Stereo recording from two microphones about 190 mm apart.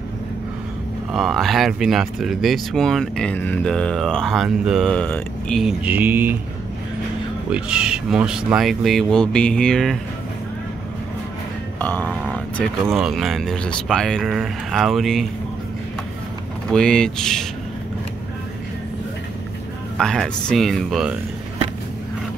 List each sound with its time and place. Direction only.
1.1 s speech: centre (ahead or behind)
7.4 s speech: 5° right (ahead or behind)
11.8 s speech: 10° left (ahead or behind)
16.6 s speech: 5° left (ahead or behind)
20.0 s speech: 5° left (ahead or behind)